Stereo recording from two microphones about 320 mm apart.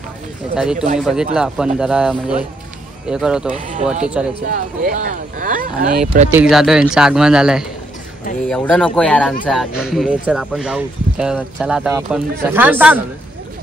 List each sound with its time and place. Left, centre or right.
0.6 s speech: centre
3.5 s speech: right
4.0 s speech: centre
4.5 s speech: right
6.5 s speech: centre